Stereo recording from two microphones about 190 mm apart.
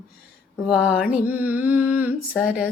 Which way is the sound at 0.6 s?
5° right (ahead or behind).